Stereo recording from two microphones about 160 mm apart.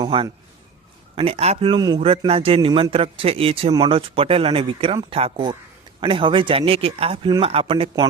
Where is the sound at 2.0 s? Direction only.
40° right (ahead or behind).